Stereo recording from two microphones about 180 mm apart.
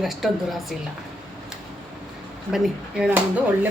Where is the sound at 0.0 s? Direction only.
Centre (ahead or behind).